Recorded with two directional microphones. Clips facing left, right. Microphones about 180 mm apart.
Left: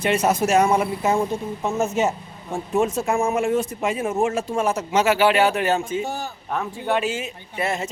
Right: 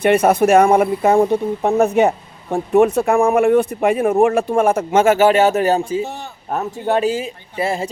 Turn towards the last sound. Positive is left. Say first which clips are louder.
# right 4 dB
turn(degrees=-30)  # may be behind; listen again after turning